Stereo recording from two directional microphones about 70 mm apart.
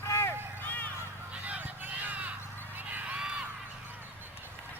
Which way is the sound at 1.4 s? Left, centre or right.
Right.